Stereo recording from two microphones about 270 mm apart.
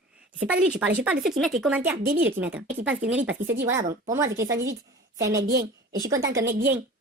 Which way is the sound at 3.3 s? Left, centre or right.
Right.